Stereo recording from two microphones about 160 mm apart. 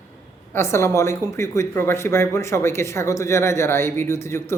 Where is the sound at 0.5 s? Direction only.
15° left (ahead or behind).